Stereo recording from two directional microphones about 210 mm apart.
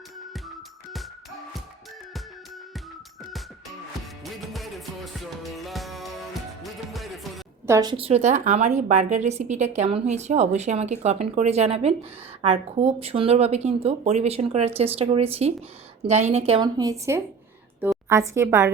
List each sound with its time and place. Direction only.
4.2 s music: centre (ahead or behind)
7.7 s a woman's voice: 20° right (ahead or behind)